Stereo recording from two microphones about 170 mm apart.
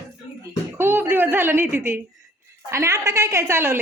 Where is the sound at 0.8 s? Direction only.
10° right (ahead or behind).